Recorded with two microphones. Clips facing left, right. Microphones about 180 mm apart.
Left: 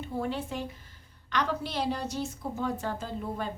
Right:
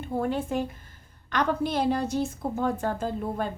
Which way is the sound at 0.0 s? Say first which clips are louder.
Right 4 dB; 50° right (ahead or behind).